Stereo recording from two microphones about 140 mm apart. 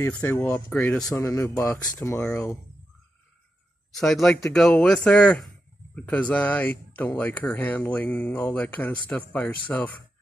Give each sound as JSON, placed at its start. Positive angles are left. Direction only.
{"t": 0.0, "sound": "speech", "side_deg": 15}
{"t": 1.2, "sound": "speech", "side_deg": 20}
{"t": 3.9, "sound": "speech", "side_deg": 5}